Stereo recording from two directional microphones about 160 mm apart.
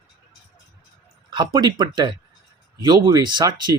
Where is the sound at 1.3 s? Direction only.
25° right (ahead or behind).